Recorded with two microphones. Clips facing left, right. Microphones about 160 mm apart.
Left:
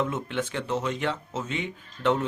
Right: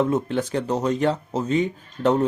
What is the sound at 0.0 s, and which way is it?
Speech, 40° right (ahead or behind).